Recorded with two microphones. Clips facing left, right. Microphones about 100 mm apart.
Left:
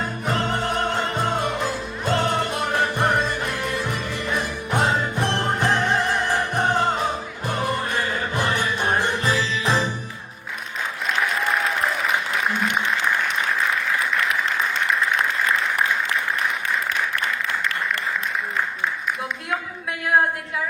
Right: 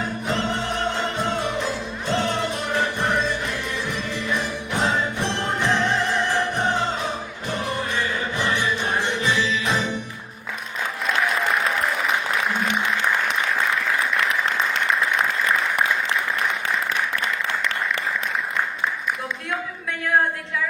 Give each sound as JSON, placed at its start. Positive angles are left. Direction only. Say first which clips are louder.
{"t": 0.5, "sound": "music", "louder": "left 2 dB", "side_deg": 50}
{"t": 8.4, "sound": "music", "louder": "even", "side_deg": 50}